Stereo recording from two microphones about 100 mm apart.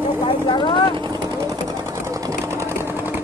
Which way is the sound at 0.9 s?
45° right (ahead or behind).